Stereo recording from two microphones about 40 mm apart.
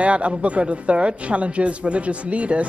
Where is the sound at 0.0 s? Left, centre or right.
Right.